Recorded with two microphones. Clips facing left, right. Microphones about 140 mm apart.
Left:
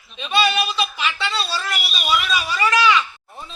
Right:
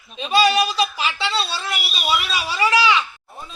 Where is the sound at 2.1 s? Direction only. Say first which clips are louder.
Left 1 dB; 30° right (ahead or behind).